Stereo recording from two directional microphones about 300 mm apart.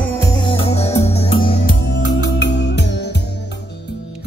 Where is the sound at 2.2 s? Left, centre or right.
Left.